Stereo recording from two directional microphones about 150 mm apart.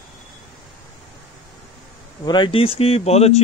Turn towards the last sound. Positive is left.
turn(degrees=45)  # may be behind; listen again after turning